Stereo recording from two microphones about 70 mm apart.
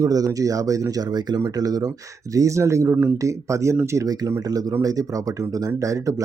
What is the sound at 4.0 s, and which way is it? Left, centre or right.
Speech, right.